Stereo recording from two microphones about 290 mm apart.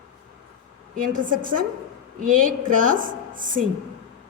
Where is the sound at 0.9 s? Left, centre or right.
Right.